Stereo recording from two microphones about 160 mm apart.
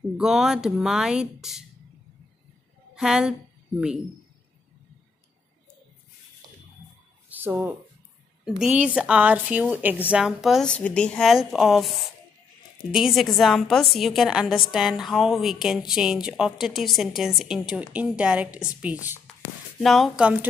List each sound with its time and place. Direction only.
0.2 s speech: 5° right (ahead or behind)
2.9 s a woman's voice: 5° right (ahead or behind)
7.2 s a sound: 10° right (ahead or behind)
8.5 s speech: 5° right (ahead or behind)